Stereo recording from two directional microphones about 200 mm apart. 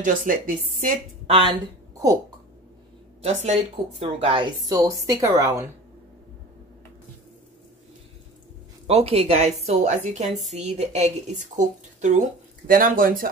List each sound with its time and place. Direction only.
0.0 s speech: 40° right (ahead or behind)
3.2 s speech: 35° right (ahead or behind); by 5.7 s 15° right (ahead or behind)
8.8 s speech: 30° right (ahead or behind)